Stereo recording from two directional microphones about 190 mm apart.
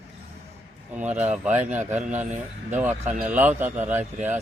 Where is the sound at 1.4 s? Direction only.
5° right (ahead or behind).